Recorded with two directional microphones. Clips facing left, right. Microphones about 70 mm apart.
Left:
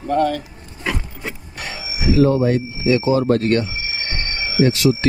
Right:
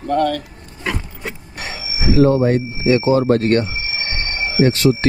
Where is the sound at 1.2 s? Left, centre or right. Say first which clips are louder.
Right 1 dB; right.